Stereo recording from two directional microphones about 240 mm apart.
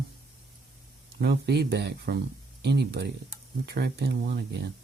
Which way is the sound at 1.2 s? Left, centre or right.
Right.